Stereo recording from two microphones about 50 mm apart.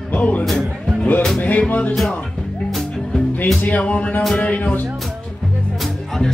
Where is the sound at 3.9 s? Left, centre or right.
Left.